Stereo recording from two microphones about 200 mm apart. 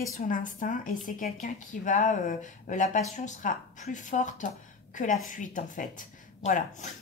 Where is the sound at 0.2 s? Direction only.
40° left (ahead or behind).